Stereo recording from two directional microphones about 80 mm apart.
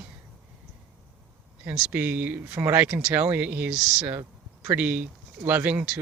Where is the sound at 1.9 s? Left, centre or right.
Right.